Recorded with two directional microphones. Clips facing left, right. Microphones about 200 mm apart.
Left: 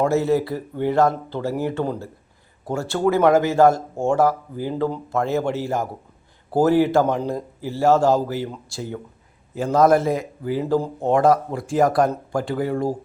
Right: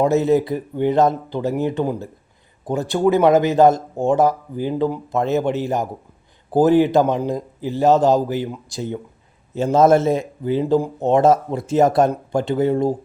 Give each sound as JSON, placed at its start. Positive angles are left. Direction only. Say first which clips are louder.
{"t": 0.0, "sound": "speech", "louder": "right 3 dB", "side_deg": -20}
{"t": 10.8, "sound": "speech", "louder": "right 3 dB", "side_deg": -10}
{"t": 11.1, "sound": "speech", "louder": "right 2 dB", "side_deg": -25}